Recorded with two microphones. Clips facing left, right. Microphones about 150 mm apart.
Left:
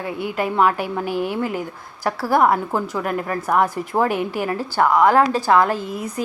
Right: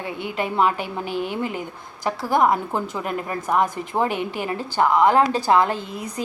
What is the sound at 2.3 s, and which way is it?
A woman's voice, 20° right (ahead or behind).